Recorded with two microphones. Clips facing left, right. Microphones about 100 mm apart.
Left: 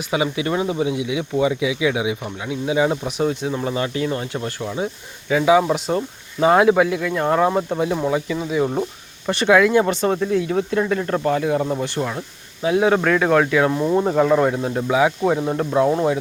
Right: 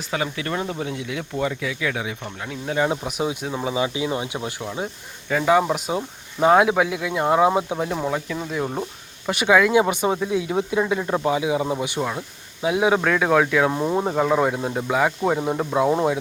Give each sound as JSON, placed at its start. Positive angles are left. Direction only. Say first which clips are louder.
{"t": 0.1, "sound": "speech", "louder": "left 5 dB", "side_deg": 15}
{"t": 4.6, "sound": "speech", "louder": "left 4 dB", "side_deg": 0}
{"t": 7.9, "sound": "speech", "louder": "left 4 dB", "side_deg": 0}
{"t": 13.7, "sound": "speech", "louder": "left 3 dB", "side_deg": -15}
{"t": 14.0, "sound": "speech", "louder": "left 3 dB", "side_deg": -5}